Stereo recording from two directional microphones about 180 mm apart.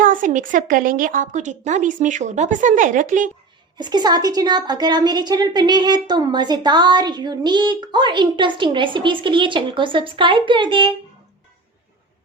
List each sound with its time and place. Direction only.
0.0 s speech: 45° right (ahead or behind)
3.8 s a woman's voice: 25° right (ahead or behind)